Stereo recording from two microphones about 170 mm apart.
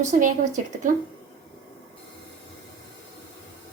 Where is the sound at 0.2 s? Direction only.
50° right (ahead or behind).